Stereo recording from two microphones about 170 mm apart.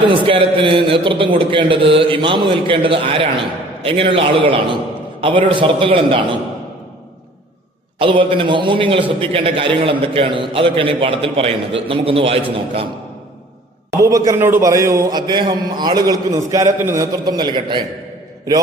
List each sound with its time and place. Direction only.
0.1 s a man's voice: 30° right (ahead or behind)
7.9 s a man's voice: 30° right (ahead or behind)
14.0 s a man's voice: 20° right (ahead or behind)